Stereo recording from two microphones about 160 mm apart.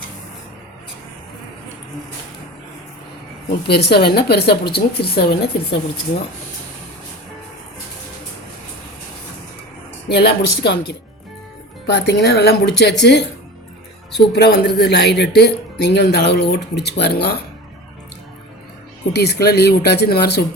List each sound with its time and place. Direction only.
3.7 s a woman's voice: 90° left
10.1 s speech: 90° left
14.3 s speech: 90° left
19.1 s a woman's voice: 85° left